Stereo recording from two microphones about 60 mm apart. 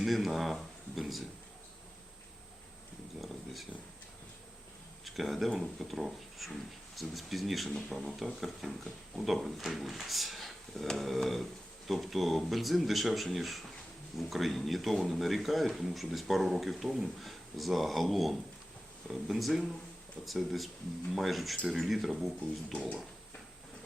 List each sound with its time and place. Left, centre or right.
0.0 s speech: centre
3.2 s a sound: centre
5.0 s speech: centre
22.7 s speech: centre